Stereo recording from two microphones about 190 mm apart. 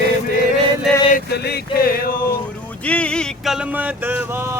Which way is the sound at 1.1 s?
60° left (ahead or behind).